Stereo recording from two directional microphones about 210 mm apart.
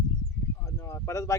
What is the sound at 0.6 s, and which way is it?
Speech, 15° left (ahead or behind).